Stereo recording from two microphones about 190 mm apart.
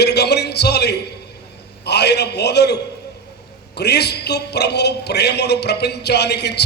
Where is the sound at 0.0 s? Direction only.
60° left (ahead or behind).